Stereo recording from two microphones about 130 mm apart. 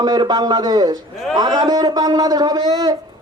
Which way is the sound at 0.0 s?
30° right (ahead or behind).